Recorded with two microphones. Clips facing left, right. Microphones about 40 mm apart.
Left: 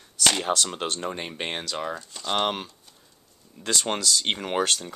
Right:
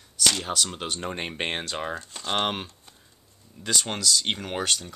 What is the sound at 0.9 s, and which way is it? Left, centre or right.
Speech, centre.